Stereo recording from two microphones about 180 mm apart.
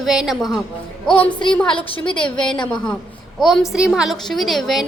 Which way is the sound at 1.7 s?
30° left (ahead or behind).